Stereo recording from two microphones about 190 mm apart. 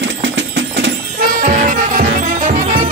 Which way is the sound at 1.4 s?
40° right (ahead or behind).